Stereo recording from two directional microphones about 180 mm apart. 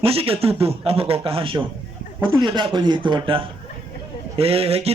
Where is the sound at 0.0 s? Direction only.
30° right (ahead or behind).